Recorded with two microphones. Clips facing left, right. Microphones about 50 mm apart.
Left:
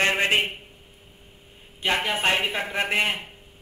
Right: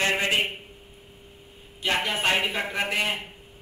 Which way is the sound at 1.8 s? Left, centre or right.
Centre.